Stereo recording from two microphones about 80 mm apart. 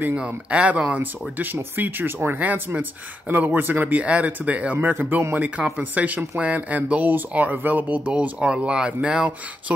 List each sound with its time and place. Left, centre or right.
0.0 s speech: right